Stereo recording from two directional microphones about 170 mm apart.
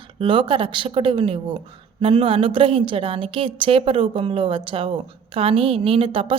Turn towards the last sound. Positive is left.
turn(degrees=-30)  # may be behind; listen again after turning